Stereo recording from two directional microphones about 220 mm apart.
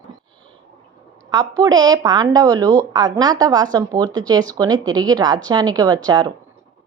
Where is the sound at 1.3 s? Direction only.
15° right (ahead or behind).